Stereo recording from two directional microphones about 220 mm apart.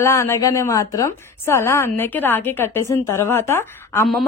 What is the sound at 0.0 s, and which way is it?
A woman's voice, 10° left (ahead or behind).